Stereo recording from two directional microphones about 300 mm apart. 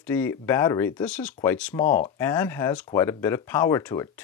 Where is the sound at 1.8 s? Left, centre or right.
Left.